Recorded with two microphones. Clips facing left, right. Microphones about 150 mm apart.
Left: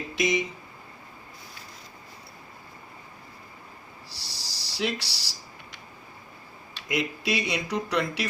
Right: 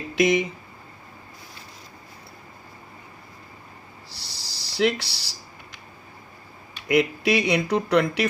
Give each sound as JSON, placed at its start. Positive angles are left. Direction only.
{"t": 0.2, "sound": "speech", "side_deg": -55}
{"t": 4.1, "sound": "a sound", "side_deg": -60}
{"t": 6.8, "sound": "speech", "side_deg": -60}